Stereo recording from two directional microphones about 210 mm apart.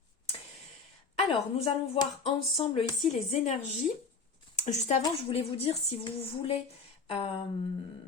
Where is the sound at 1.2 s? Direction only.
30° left (ahead or behind).